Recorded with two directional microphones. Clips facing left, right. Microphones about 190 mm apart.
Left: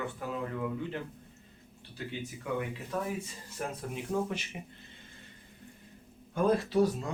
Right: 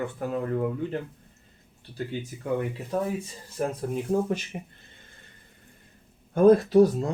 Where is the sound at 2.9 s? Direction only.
35° right (ahead or behind).